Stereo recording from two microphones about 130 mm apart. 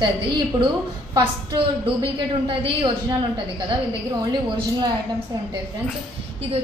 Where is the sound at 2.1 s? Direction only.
40° right (ahead or behind).